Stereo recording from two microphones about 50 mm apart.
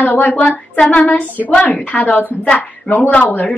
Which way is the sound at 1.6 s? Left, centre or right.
Left.